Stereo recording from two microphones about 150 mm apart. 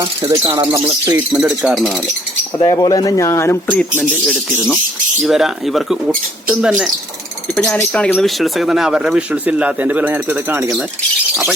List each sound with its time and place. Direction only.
0.0 s speech: 20° right (ahead or behind); by 1.9 s centre (ahead or behind)
2.6 s speech: 30° left (ahead or behind)
4.3 s speech: 5° right (ahead or behind)
7.6 s speech: 10° left (ahead or behind); by 10.7 s 15° right (ahead or behind)